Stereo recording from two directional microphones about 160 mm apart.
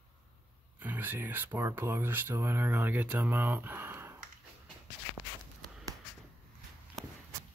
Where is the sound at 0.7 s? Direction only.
10° right (ahead or behind).